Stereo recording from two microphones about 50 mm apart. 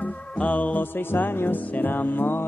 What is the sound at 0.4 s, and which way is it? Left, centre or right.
Music, left.